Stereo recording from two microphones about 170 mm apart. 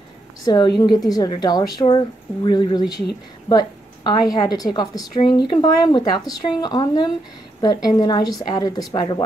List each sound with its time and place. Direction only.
0.5 s a woman's voice: 25° left (ahead or behind)